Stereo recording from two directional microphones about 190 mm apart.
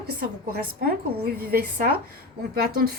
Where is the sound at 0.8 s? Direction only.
55° right (ahead or behind).